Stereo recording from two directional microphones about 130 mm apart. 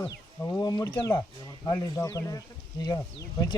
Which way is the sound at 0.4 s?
30° left (ahead or behind).